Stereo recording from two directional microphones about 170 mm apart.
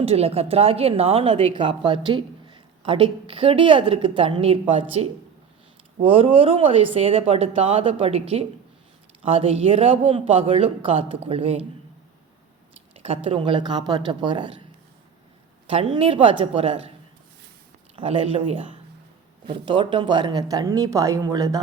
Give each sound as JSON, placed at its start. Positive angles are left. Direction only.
{"t": 0.0, "sound": "a woman's voice", "side_deg": -35}
{"t": 13.0, "sound": "speech", "side_deg": -35}
{"t": 15.7, "sound": "a woman's voice", "side_deg": -30}
{"t": 17.9, "sound": "a woman's voice", "side_deg": -35}